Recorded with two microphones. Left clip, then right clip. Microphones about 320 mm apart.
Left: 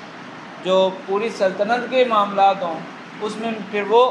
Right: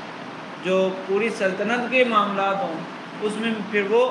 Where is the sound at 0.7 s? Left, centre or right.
Centre.